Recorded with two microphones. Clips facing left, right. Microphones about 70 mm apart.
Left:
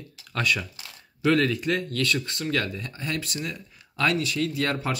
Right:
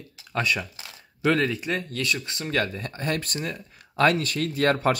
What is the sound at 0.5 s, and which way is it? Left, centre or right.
Speech, centre.